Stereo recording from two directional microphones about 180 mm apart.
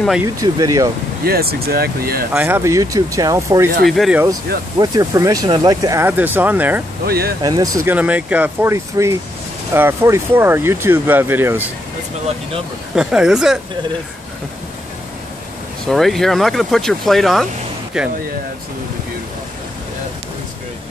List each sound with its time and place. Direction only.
0.2 s speech: 20° right (ahead or behind)
1.2 s speech: 60° right (ahead or behind)
2.3 s speech: 10° right (ahead or behind)
3.8 s speech: centre (ahead or behind)
4.7 s speech: 20° right (ahead or behind)
7.1 s speech: 60° right (ahead or behind)
7.4 s speech: 20° right (ahead or behind)
12.9 s speech: 5° right (ahead or behind)
15.9 s speech: centre (ahead or behind)